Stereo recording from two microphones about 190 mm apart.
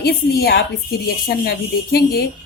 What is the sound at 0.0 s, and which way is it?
A woman's voice, 55° left (ahead or behind).